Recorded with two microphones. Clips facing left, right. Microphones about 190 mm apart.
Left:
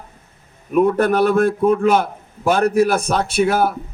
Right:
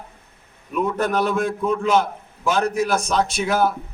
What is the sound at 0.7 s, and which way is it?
A man's voice, 55° left (ahead or behind).